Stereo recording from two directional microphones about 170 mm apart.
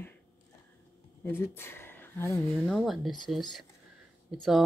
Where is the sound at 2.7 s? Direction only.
Centre (ahead or behind).